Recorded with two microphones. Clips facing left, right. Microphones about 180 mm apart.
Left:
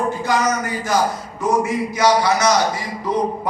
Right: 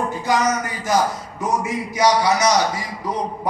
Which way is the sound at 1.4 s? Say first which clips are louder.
Left 4 dB; 15° right (ahead or behind).